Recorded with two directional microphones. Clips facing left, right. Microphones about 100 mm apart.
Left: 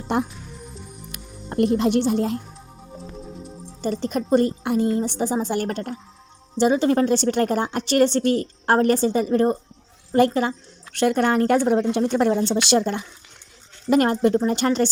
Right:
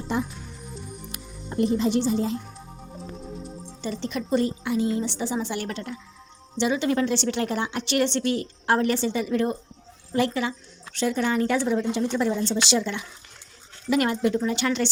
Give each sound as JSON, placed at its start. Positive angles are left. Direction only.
{"t": 0.1, "sound": "a woman's voice", "side_deg": 60}
{"t": 1.5, "sound": "a woman's voice", "side_deg": 60}
{"t": 3.8, "sound": "a woman's voice", "side_deg": 50}
{"t": 10.9, "sound": "a woman's voice", "side_deg": 60}